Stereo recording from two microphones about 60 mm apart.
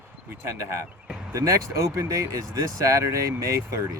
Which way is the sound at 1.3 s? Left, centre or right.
Right.